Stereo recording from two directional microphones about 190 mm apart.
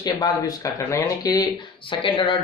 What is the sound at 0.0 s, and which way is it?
Speech, 20° left (ahead or behind).